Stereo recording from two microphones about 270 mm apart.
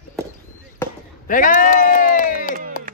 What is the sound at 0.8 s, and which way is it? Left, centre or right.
Basketball bounce, centre.